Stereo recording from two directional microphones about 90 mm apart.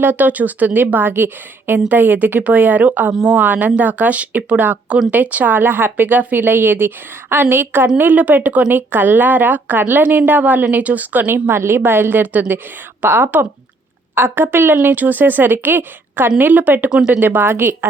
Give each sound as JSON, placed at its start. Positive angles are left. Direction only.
{"t": 0.0, "sound": "a woman's voice", "side_deg": -20}
{"t": 3.4, "sound": "a woman's voice", "side_deg": -20}
{"t": 16.9, "sound": "speech", "side_deg": -10}
{"t": 17.2, "sound": "a woman's voice", "side_deg": -25}